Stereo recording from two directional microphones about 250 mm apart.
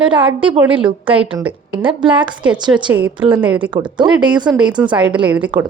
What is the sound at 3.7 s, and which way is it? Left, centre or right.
Speech, centre.